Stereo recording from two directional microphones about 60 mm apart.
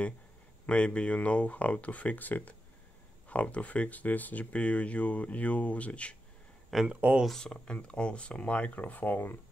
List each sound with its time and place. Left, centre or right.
0.7 s speech: centre
6.7 s speech: centre
7.2 s speech: centre; by 9.4 s left